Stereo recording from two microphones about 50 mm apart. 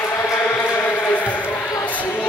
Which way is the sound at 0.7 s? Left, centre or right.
Left.